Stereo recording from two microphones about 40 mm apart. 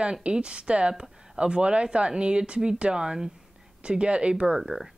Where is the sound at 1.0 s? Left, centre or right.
Centre.